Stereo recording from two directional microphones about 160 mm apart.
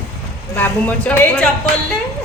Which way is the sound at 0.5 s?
10° left (ahead or behind).